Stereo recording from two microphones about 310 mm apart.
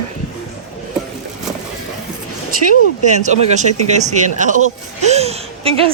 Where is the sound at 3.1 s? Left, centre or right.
Right.